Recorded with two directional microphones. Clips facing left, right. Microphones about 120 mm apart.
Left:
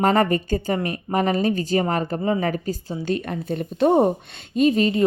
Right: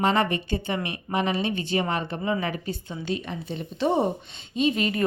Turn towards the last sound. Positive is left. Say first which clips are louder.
# left 6 dB
turn(degrees=35)  # may be behind; listen again after turning